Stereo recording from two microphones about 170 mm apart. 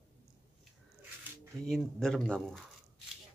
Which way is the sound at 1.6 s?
Centre (ahead or behind).